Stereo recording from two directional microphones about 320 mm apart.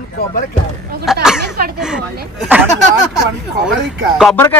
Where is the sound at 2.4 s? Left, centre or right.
Centre.